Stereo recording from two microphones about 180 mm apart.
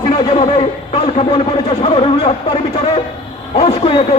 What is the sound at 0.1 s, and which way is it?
A man's voice, 30° left (ahead or behind).